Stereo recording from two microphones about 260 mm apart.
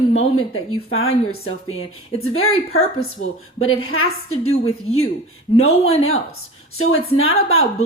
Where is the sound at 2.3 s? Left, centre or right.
Left.